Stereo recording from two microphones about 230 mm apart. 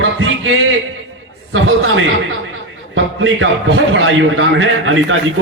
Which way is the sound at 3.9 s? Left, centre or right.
Right.